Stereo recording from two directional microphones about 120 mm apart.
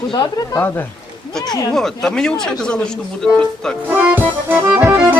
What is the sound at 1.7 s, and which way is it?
Speech, 5° left (ahead or behind).